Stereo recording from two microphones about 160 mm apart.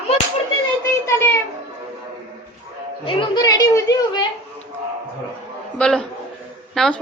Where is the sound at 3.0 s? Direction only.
25° left (ahead or behind).